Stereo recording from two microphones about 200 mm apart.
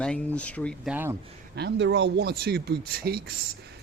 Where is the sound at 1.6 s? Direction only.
60° right (ahead or behind).